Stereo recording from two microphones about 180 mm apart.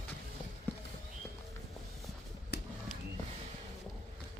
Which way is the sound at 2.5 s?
65° left (ahead or behind).